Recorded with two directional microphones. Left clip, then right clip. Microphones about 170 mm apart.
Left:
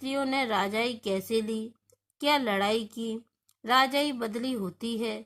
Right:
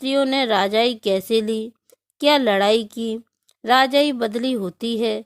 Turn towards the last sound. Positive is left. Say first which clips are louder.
# right 11 dB
turn(degrees=-40)  # may be behind; listen again after turning